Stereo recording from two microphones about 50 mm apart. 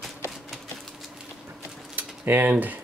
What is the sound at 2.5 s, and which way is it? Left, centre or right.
Speech, right.